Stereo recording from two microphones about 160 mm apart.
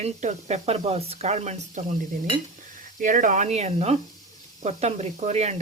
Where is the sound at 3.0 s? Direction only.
55° right (ahead or behind).